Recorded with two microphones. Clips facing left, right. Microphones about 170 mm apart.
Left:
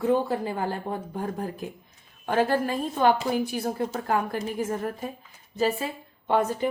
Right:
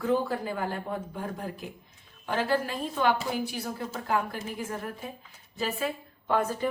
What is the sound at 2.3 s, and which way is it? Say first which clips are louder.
A woman's voice: left 4 dB; 50° left (ahead or behind).